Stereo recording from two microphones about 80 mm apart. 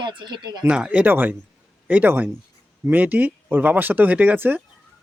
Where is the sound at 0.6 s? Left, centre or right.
Centre.